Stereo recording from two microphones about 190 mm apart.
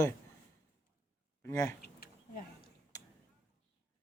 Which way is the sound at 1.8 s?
55° left (ahead or behind).